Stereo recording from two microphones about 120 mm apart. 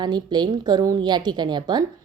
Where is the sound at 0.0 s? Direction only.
40° right (ahead or behind).